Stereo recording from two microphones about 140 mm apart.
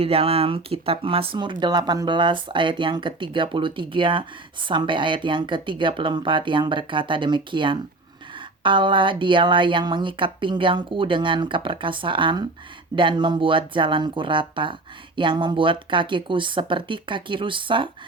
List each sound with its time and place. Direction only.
0.0 s speech: 45° right (ahead or behind)